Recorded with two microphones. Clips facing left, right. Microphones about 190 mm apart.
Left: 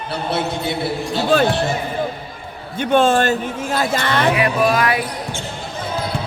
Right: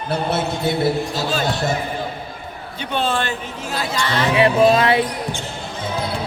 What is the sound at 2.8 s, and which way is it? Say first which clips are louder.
Speech: left 7 dB; 50° left (ahead or behind).